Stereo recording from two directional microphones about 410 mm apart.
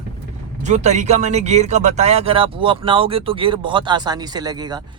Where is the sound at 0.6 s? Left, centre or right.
Centre.